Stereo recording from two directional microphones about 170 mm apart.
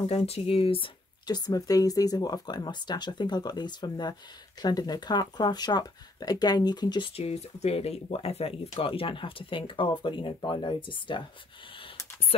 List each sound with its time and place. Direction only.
0.0 s speech: 35° left (ahead or behind)
7.2 s speech: 40° left (ahead or behind)